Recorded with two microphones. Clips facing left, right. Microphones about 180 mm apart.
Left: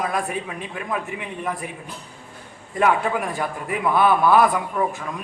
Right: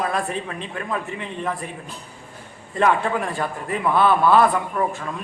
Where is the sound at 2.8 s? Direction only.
10° left (ahead or behind).